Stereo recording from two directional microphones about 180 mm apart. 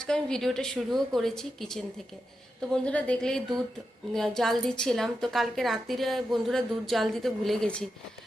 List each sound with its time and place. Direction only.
0.0 s a woman's voice: 5° left (ahead or behind)